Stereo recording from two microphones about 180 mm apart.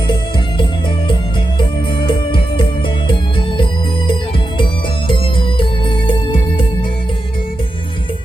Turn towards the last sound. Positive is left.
turn(degrees=30)  # may be behind; listen again after turning